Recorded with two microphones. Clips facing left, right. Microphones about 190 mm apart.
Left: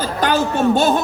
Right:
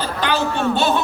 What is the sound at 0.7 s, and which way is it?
Speech, 45° left (ahead or behind).